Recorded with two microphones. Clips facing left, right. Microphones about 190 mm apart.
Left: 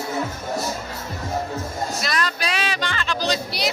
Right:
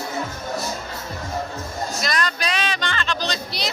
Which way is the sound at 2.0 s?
5° left (ahead or behind).